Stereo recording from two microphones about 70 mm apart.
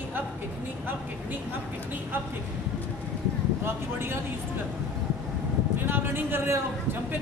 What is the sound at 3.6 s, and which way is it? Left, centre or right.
Speech, right.